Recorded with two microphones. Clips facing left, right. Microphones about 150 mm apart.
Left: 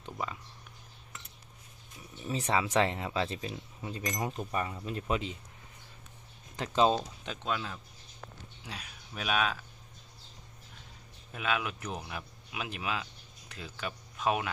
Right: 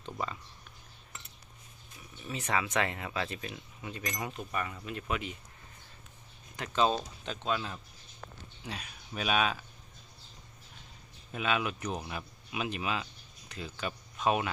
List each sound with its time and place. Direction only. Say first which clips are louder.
0.0 s a sound: right 1 dB; 5° left (ahead or behind)
2.2 s speech: left 3 dB; 35° left (ahead or behind)
6.6 s speech: left 2 dB; 20° left (ahead or behind)
7.3 s speech: right 3 dB; centre (ahead or behind)
11.3 s speech: right 2 dB; centre (ahead or behind)